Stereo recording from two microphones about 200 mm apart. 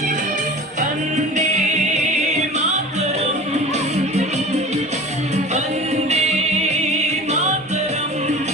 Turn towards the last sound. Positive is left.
turn(degrees=-35)  # may be behind; listen again after turning